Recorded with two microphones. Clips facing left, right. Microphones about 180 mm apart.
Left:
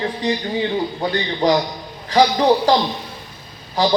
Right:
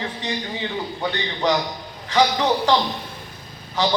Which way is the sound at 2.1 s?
35° left (ahead or behind).